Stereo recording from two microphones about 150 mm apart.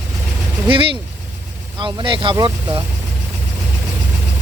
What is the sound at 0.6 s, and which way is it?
Speech, 35° right (ahead or behind).